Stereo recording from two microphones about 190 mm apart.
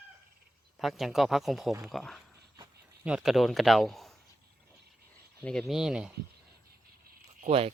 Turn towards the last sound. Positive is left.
turn(degrees=-30)  # may be behind; listen again after turning